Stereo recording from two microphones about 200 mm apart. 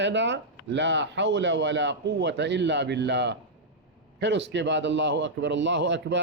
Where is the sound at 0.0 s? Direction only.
60° right (ahead or behind).